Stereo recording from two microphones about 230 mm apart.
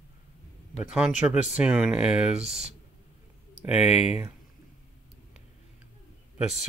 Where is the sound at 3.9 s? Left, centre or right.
Left.